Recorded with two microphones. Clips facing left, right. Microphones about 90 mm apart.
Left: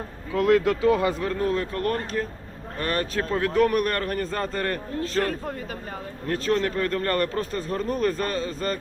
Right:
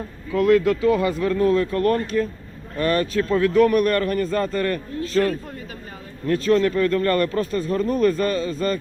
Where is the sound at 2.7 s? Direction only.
90° right.